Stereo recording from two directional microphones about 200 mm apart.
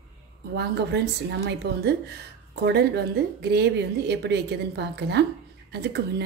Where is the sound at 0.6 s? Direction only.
55° right (ahead or behind).